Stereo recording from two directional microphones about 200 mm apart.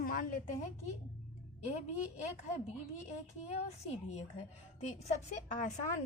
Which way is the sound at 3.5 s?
35° left (ahead or behind).